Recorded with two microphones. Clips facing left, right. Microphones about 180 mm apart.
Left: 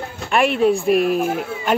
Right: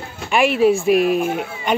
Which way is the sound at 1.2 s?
40° left (ahead or behind).